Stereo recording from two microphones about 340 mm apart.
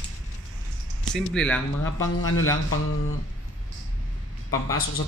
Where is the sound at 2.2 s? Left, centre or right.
Left.